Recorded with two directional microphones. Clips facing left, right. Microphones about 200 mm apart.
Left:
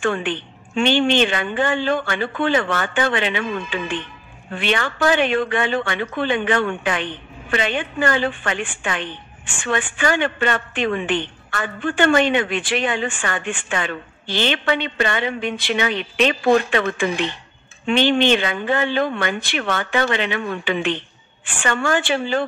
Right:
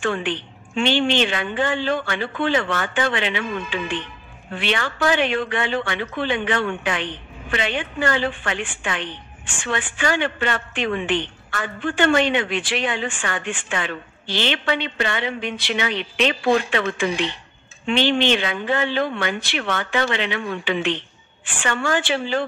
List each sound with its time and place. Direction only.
0.0 s a woman's voice: 50° left (ahead or behind)
4.6 s a woman's voice: 50° left (ahead or behind)